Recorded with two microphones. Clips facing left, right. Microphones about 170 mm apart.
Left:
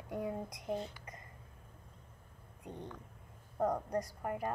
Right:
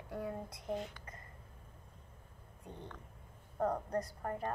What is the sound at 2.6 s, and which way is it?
A woman's voice, 15° left (ahead or behind).